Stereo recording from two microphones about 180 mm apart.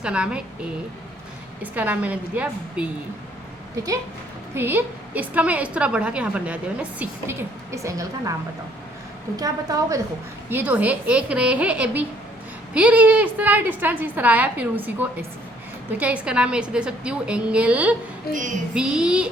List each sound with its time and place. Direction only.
0.0 s a woman's voice: 5° right (ahead or behind)
4.5 s a woman's voice: 10° right (ahead or behind)
10.5 s a woman's voice: 10° right (ahead or behind)
18.3 s child singing: 60° left (ahead or behind)
18.7 s a woman's voice: 5° right (ahead or behind)